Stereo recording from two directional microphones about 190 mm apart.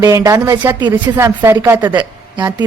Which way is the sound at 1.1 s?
10° right (ahead or behind).